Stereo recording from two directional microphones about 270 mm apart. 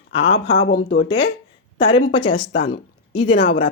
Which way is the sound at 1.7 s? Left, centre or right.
Left.